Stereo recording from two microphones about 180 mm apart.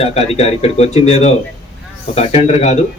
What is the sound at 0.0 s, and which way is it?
Speech, 35° left (ahead or behind).